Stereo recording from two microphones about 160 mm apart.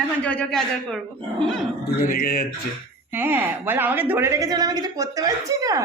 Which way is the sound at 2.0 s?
65° left (ahead or behind).